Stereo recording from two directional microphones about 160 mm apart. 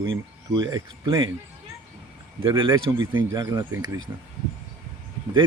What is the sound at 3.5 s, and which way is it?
Speech, 15° right (ahead or behind).